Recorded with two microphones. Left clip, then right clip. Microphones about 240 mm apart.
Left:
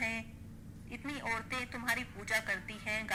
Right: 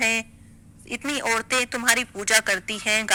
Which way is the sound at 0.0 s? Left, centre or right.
Right.